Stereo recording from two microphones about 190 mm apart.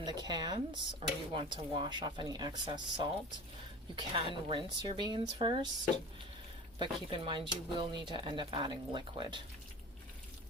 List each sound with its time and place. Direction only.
0.0 s speech: 20° right (ahead or behind)
6.7 s speech: 25° right (ahead or behind)